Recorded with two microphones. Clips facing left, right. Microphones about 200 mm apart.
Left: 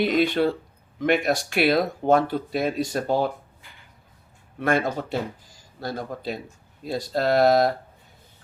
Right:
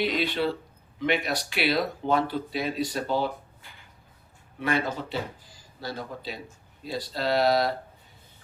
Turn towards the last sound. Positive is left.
turn(degrees=50)  # may be behind; listen again after turning